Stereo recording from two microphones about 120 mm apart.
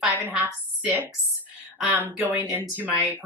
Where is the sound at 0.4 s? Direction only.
15° right (ahead or behind).